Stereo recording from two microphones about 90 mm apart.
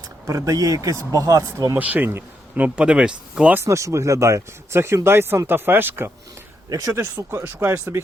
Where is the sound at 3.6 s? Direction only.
35° right (ahead or behind).